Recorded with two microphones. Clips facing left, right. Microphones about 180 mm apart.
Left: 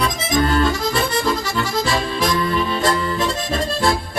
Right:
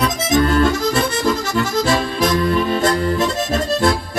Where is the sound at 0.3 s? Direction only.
50° right (ahead or behind).